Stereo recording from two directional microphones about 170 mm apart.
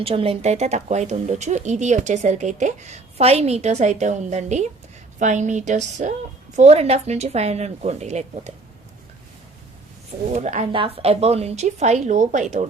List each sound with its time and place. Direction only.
0.0 s a woman's voice: 35° right (ahead or behind)
10.3 s speech: 45° right (ahead or behind)
10.7 s a woman's voice: 30° right (ahead or behind)